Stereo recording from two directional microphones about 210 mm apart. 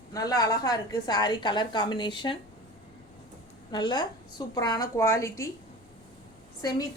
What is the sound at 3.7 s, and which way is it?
A woman's voice, 20° left (ahead or behind).